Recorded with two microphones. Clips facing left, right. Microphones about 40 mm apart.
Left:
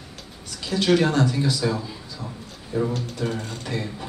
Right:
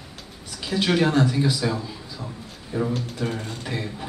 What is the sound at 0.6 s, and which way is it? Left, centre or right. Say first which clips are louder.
A man's voice: left 1 dB; centre.